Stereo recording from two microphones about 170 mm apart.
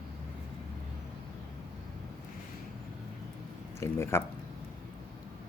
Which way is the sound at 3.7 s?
15° left (ahead or behind).